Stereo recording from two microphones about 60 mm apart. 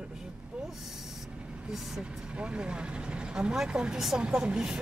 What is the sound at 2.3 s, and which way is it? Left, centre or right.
Speech, centre.